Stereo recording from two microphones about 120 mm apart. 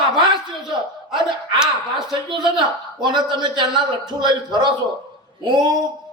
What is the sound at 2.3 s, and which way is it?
A man's voice, 40° right (ahead or behind).